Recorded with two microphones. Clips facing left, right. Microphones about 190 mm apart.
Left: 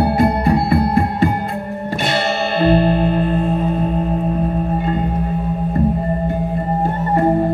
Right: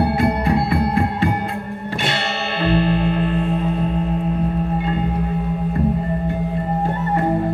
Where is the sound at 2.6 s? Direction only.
40° left (ahead or behind).